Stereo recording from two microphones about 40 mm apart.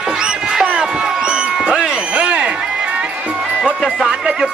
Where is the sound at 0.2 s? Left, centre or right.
Right.